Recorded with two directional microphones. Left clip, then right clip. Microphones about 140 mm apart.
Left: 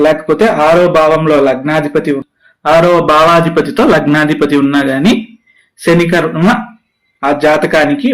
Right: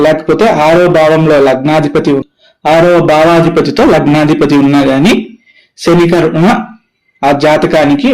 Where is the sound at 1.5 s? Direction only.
35° right (ahead or behind).